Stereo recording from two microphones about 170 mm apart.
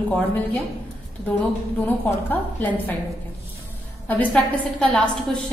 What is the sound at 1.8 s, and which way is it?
A woman's voice, 10° left (ahead or behind).